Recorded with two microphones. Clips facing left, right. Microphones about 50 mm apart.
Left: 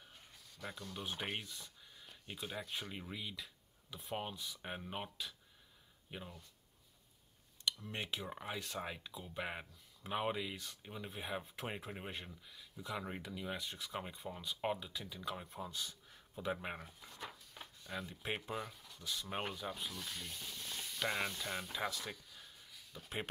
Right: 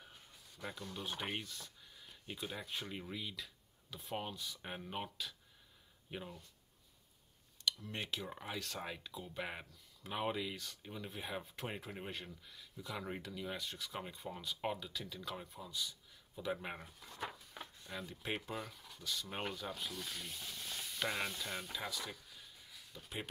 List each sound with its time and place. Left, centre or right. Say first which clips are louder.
0.9 s speech: even; centre
7.8 s speech: even; centre
15.4 s speech: even; left
16.6 s speech: left 1 dB; centre
22.9 s speech: left 2 dB; left